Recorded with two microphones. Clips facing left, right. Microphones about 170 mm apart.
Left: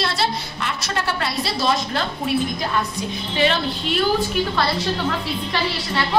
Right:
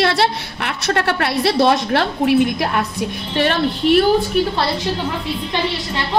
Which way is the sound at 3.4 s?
55° right (ahead or behind).